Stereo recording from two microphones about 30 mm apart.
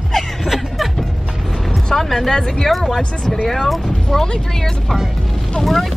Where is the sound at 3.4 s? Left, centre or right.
Centre.